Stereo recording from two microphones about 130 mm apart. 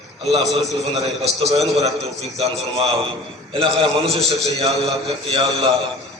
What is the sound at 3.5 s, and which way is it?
A man's voice, 50° right (ahead or behind).